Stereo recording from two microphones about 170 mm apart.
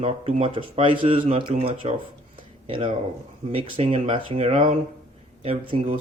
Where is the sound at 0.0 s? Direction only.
40° right (ahead or behind).